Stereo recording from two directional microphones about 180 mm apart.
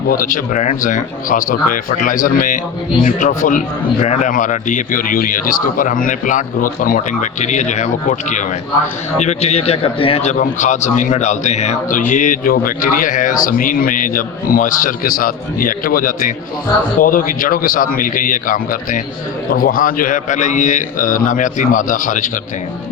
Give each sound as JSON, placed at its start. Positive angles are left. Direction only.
{"t": 0.1, "sound": "a man's voice", "side_deg": 50}